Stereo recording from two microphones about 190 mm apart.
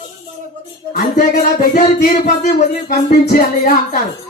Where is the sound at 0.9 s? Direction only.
45° left (ahead or behind).